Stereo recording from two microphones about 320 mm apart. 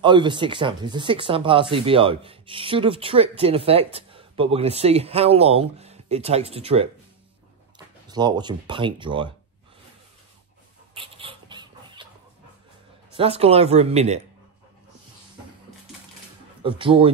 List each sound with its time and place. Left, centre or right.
0.0 s speech: centre
8.1 s speech: centre
11.0 s dog: centre
13.1 s speech: centre
16.6 s speech: centre